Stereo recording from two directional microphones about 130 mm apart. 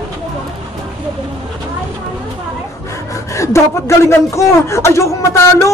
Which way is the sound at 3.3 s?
20° left (ahead or behind).